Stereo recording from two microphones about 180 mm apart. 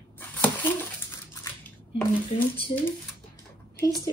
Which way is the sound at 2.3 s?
40° left (ahead or behind).